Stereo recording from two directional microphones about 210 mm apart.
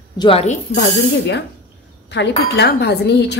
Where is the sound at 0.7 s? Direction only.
55° left (ahead or behind).